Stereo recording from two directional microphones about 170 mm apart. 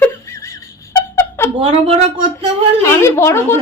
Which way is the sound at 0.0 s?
15° left (ahead or behind).